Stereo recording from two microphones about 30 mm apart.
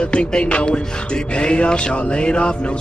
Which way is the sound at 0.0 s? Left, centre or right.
Left.